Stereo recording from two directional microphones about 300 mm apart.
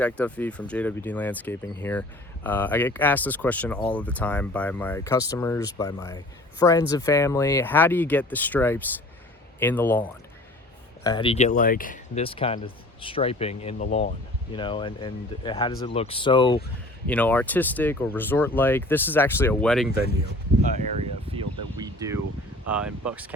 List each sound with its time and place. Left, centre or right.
0.0 s speech: centre; by 14.1 s left
14.5 s speech: centre
17.1 s speech: centre
21.8 s a sound: centre
22.7 s speech: centre